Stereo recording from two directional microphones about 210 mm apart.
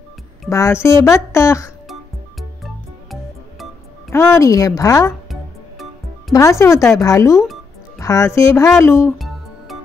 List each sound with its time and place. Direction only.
0.5 s speech: 15° left (ahead or behind)
2.6 s music: centre (ahead or behind)
4.1 s speech: 15° left (ahead or behind)
5.3 s music: centre (ahead or behind)
6.3 s speech: 15° left (ahead or behind)